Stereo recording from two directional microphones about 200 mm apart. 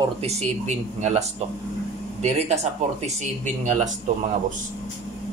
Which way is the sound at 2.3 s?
35° right (ahead or behind).